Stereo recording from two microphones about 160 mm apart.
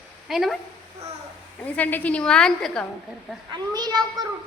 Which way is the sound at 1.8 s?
10° left (ahead or behind).